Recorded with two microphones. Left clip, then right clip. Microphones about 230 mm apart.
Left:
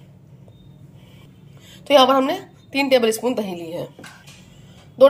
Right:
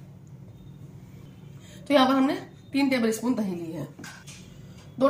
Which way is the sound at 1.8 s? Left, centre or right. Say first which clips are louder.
Left 7 dB; left.